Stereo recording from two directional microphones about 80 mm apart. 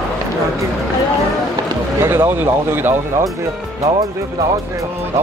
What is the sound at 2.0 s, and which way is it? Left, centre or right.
Speech, right.